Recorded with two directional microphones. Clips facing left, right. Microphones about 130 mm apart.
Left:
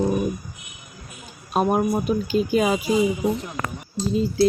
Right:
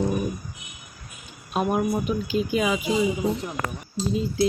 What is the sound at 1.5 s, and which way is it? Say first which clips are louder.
A woman's voice: left 3 dB; 40° left (ahead or behind).